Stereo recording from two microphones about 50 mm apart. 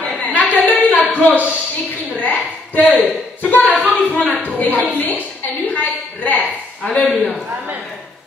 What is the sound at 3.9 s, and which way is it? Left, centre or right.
A woman's voice, left.